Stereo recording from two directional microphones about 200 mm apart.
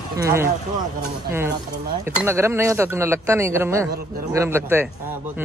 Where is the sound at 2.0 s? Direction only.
10° right (ahead or behind).